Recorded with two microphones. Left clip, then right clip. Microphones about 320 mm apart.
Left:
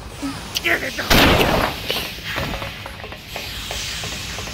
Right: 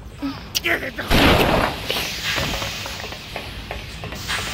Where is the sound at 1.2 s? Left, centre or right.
Centre.